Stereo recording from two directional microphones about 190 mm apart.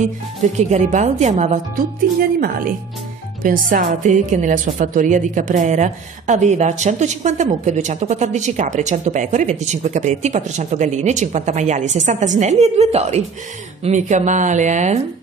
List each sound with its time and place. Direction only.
0.6 s a woman's voice: 40° right (ahead or behind)